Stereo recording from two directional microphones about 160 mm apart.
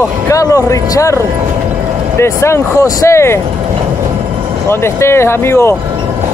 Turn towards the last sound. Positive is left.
turn(degrees=15)  # may be behind; listen again after turning